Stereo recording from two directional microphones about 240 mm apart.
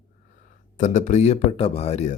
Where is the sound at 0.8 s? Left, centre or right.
Left.